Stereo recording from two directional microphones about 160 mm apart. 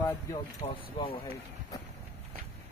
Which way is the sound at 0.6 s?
35° left (ahead or behind).